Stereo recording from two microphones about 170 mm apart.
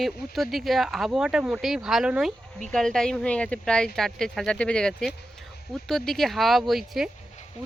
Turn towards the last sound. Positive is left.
turn(degrees=0)  # may be behind; listen again after turning